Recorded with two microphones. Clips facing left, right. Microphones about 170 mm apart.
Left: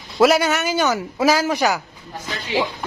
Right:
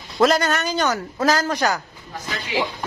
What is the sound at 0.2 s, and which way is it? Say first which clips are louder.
A man's voice: left 2 dB; 5° left (ahead or behind).